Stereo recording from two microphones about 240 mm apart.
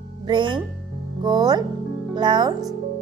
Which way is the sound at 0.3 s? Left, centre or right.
Centre.